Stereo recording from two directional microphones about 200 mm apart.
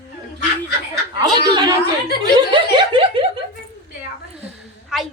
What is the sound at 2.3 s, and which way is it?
Snicker, 20° right (ahead or behind).